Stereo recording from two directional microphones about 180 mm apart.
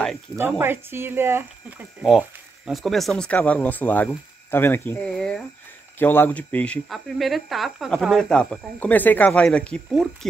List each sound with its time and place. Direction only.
0.4 s speech: 15° right (ahead or behind)
2.0 s a woman's voice: centre (ahead or behind)